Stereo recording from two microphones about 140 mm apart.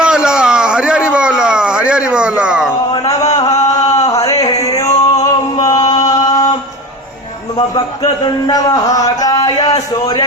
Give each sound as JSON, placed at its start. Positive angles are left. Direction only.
{"t": 0.0, "sound": "a sound", "side_deg": -5}
{"t": 2.9, "sound": "a sound", "side_deg": 30}
{"t": 3.3, "sound": "chant", "side_deg": 25}
{"t": 4.6, "sound": "music", "side_deg": 25}
{"t": 5.9, "sound": "chant", "side_deg": 25}
{"t": 8.4, "sound": "speech", "side_deg": 25}